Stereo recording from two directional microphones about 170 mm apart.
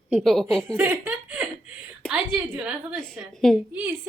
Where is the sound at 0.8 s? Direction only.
10° right (ahead or behind).